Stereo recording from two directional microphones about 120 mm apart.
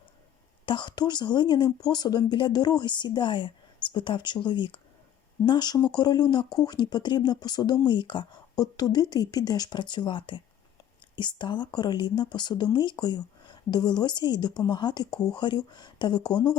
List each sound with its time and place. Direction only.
0.6 s speech: 40° left (ahead or behind)